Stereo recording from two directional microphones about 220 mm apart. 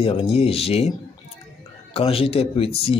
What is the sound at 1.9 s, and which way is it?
Speech, 25° left (ahead or behind).